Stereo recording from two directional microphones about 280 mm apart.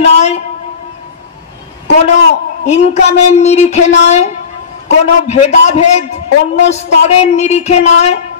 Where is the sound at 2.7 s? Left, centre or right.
Left.